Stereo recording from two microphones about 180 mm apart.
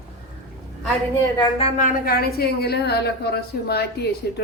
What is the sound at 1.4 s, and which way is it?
A woman's voice, 35° left (ahead or behind).